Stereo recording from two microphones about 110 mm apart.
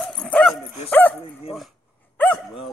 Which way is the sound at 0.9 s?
15° left (ahead or behind).